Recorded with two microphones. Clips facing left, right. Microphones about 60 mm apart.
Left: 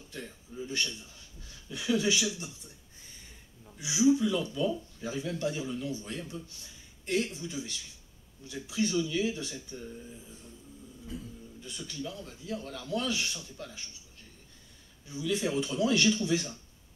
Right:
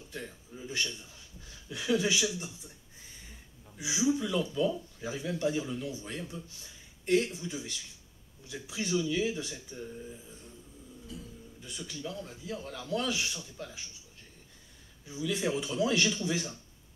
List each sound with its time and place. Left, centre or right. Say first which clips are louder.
0.1 s a man's voice: even; centre
11.1 s speech: left 4 dB; left
11.6 s speech: left 1 dB; centre
15.0 s speech: left 1 dB; centre